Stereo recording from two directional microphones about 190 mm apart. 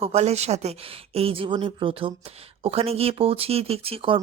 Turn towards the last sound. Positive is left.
turn(degrees=-30)  # may be behind; listen again after turning